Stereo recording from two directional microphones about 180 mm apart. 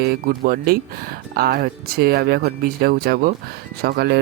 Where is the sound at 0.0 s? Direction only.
55° right (ahead or behind).